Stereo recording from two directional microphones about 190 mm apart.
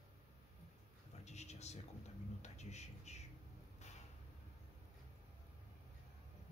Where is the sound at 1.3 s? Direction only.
35° left (ahead or behind).